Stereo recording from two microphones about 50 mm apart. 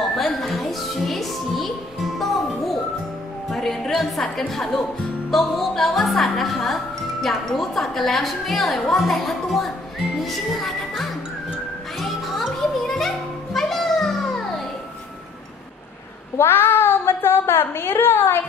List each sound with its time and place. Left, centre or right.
0.1 s music: centre
4.2 s a woman's voice: centre
12.0 s music: centre
16.3 s a sound: left